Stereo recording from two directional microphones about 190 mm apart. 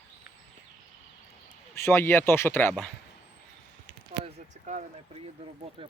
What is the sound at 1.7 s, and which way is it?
Speech, 15° left (ahead or behind).